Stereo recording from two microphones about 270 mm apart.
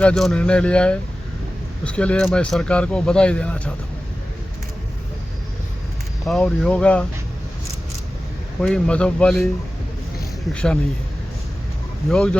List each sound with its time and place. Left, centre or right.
0.0 s speech: centre
6.2 s speech: centre
8.6 s speech: centre
10.5 s speech: centre
12.0 s speech: centre